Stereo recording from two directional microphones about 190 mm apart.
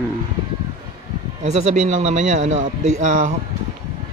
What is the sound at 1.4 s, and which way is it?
A man's voice, 35° right (ahead or behind).